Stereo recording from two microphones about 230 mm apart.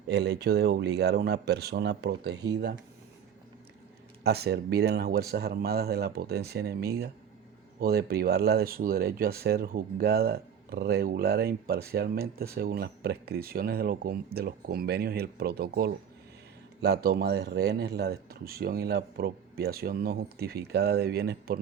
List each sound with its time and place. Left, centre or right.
0.1 s speech: right
4.2 s speech: right